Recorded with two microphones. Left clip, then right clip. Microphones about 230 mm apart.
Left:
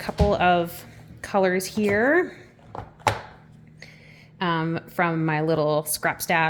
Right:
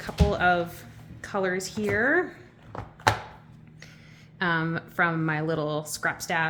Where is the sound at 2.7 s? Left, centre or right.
Centre.